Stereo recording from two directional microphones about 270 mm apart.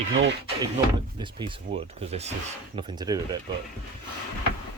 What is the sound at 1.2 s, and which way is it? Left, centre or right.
Speech, centre.